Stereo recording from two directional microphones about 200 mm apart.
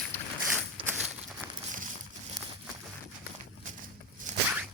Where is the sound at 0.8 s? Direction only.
25° right (ahead or behind).